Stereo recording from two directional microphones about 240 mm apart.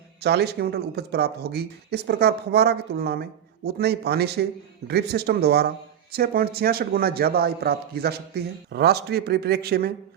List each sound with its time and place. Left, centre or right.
0.2 s speech: right